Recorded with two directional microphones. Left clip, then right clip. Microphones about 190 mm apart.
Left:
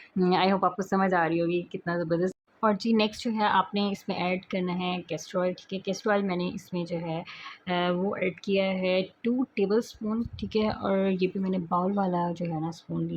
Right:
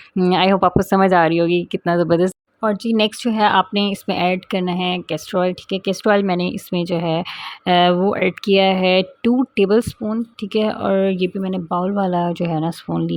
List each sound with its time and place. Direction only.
0.3 s speech: 40° right (ahead or behind)
2.6 s speech: 30° right (ahead or behind)
3.2 s speech: 40° right (ahead or behind)